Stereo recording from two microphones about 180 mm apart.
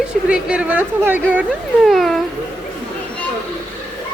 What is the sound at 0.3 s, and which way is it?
A woman's voice, 5° right (ahead or behind).